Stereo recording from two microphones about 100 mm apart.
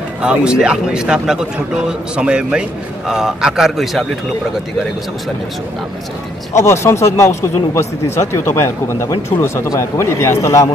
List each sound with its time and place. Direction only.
0.2 s a man's voice: 10° right (ahead or behind)
6.5 s speech: 25° left (ahead or behind)